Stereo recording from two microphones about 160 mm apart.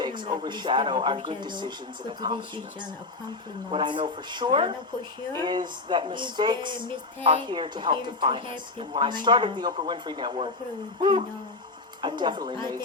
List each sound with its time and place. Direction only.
0.0 s a woman's voice: 30° right (ahead or behind)
3.7 s a woman's voice: 30° right (ahead or behind)
12.0 s a woman's voice: 30° right (ahead or behind)